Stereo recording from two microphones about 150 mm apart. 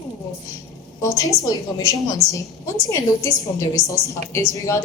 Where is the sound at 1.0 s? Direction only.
20° left (ahead or behind).